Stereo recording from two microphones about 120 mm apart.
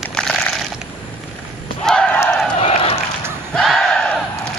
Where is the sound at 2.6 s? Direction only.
55° left (ahead or behind).